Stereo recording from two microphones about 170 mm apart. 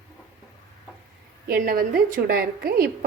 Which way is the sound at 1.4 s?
60° right (ahead or behind).